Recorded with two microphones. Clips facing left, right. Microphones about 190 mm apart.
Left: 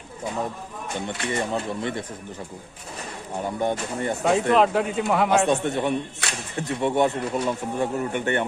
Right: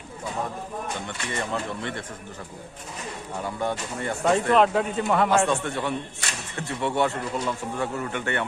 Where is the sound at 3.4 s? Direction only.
20° left (ahead or behind).